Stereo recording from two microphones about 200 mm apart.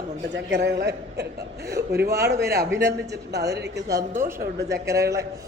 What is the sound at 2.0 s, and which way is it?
Speech, 15° right (ahead or behind).